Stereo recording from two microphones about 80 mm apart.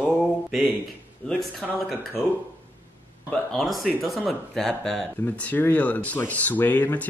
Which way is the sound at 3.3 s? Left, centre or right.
Centre.